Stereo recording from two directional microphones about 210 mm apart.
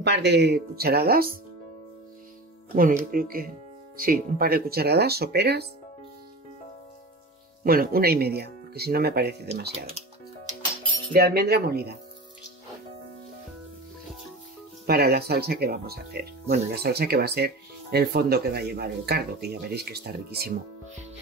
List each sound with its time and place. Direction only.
0.0 s speech: 55° right (ahead or behind)
2.7 s speech: 40° right (ahead or behind)
7.6 s speech: 45° right (ahead or behind)
11.1 s speech: 50° right (ahead or behind)
14.9 s speech: 50° right (ahead or behind)